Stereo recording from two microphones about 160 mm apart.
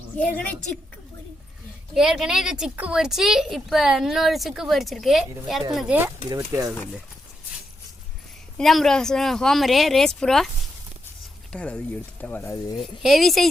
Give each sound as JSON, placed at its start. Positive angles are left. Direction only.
{"t": 0.2, "sound": "speech", "side_deg": 10}
{"t": 1.9, "sound": "a woman's voice", "side_deg": 0}
{"t": 6.1, "sound": "speech", "side_deg": -20}
{"t": 8.5, "sound": "a woman's voice", "side_deg": 0}
{"t": 11.5, "sound": "a woman's voice", "side_deg": 5}
{"t": 13.0, "sound": "a woman's voice", "side_deg": 0}